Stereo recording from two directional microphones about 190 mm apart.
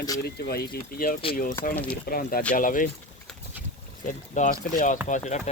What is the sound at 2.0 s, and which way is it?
Speech, 50° left (ahead or behind).